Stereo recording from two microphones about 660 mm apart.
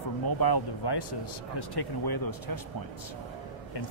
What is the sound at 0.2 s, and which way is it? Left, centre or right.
Speech, left.